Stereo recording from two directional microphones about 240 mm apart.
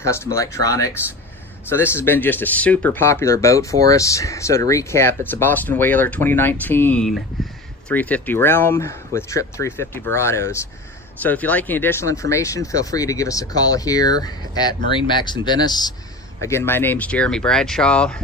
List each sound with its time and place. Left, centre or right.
0.0 s speech: centre